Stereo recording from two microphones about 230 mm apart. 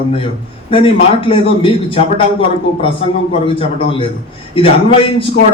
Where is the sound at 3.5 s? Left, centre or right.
Left.